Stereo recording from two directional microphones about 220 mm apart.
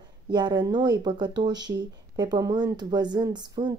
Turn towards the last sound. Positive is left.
turn(degrees=-20)  # may be behind; listen again after turning